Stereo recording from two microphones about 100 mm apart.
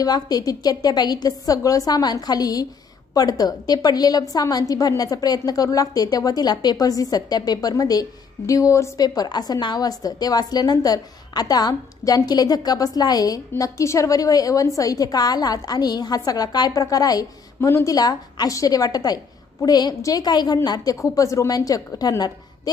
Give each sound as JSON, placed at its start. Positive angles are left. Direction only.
{"t": 0.0, "sound": "a woman's voice", "side_deg": 40}
{"t": 9.0, "sound": "a woman's voice", "side_deg": 40}
{"t": 17.6, "sound": "speech", "side_deg": 25}
{"t": 17.9, "sound": "a woman's voice", "side_deg": 40}